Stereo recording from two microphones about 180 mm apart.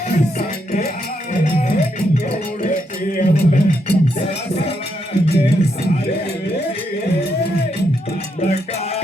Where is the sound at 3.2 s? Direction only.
50° left (ahead or behind).